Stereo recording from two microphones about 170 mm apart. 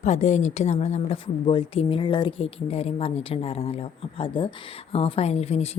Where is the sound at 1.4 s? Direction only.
30° left (ahead or behind).